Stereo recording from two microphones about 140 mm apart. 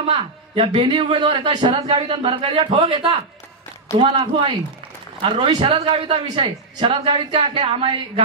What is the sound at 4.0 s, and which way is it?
Speech, 40° right (ahead or behind).